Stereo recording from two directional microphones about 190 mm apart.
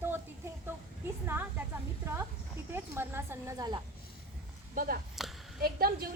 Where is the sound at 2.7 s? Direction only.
10° right (ahead or behind).